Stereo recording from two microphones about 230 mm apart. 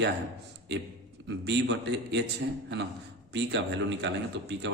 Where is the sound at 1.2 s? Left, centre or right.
Right.